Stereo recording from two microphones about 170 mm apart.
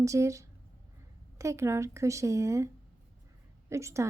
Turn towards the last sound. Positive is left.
turn(degrees=-15)  # may be behind; listen again after turning